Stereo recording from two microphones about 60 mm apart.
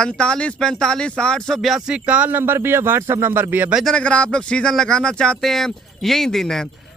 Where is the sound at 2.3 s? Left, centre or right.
Right.